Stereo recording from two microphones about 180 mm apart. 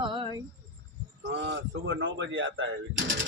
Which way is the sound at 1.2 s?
85° right.